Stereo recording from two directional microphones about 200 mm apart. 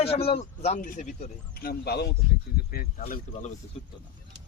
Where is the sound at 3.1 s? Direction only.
35° left (ahead or behind).